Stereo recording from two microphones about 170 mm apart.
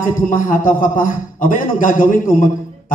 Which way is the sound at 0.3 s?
50° left (ahead or behind).